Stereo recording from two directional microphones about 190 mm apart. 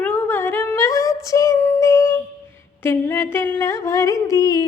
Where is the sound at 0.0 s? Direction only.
10° left (ahead or behind).